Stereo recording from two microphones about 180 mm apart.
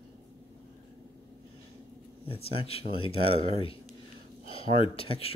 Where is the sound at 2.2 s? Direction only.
35° left (ahead or behind).